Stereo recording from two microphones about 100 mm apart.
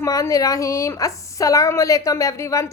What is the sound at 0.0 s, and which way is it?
A woman's voice, 35° left (ahead or behind).